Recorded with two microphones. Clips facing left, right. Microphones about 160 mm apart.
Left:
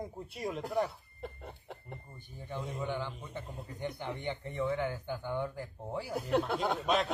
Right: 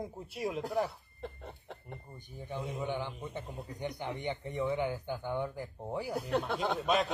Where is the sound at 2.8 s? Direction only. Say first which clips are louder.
Even; 15° right (ahead or behind).